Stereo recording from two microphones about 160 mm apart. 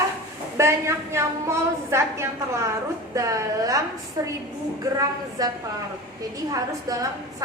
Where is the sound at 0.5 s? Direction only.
15° right (ahead or behind).